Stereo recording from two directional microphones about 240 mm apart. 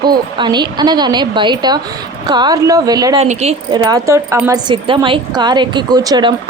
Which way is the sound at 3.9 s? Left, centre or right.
Centre.